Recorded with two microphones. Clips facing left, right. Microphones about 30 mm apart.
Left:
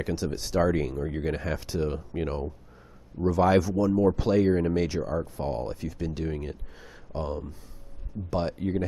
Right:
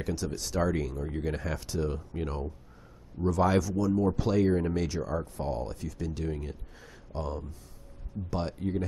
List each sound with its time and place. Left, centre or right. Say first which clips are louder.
0.0 s speech: left 3 dB; left